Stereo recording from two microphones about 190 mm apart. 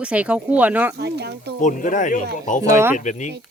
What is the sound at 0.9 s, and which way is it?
Speech, 60° right (ahead or behind).